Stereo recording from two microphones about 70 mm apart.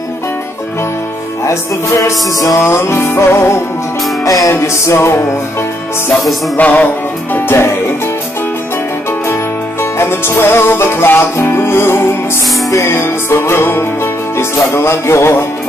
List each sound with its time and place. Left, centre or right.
1.4 s music: left
2.6 s music: left
6.5 s music: left
7.3 s music: left
9.3 s music: left